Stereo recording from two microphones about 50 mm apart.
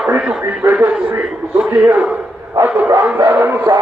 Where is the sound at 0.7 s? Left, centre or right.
Right.